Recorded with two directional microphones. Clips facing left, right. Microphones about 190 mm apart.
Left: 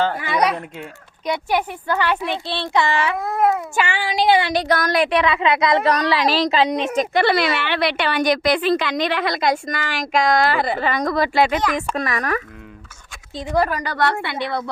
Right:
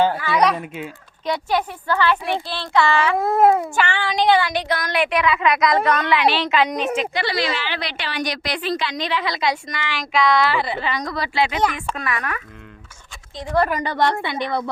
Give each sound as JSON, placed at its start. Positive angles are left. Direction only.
{"t": 0.2, "sound": "a sound", "side_deg": 15}
{"t": 0.5, "sound": "speech", "side_deg": 0}
{"t": 1.2, "sound": "a child's voice", "side_deg": 15}
{"t": 3.2, "sound": "a woman's voice", "side_deg": -25}
{"t": 3.8, "sound": "a child's voice", "side_deg": 10}
{"t": 4.5, "sound": "a woman's voice", "side_deg": 40}
{"t": 6.9, "sound": "speech", "side_deg": 50}
{"t": 13.7, "sound": "a woman's voice", "side_deg": -20}